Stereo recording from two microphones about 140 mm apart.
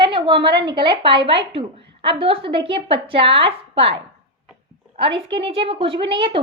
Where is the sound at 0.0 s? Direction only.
35° right (ahead or behind).